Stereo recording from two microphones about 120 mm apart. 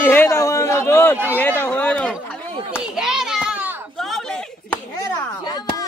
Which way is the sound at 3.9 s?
Centre (ahead or behind).